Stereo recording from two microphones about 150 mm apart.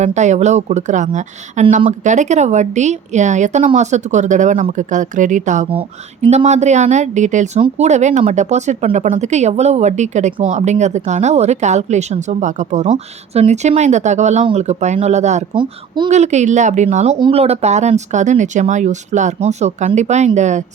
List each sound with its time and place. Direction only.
0.0 s a woman's voice: 50° right (ahead or behind)
17.2 s a woman's voice: 35° right (ahead or behind)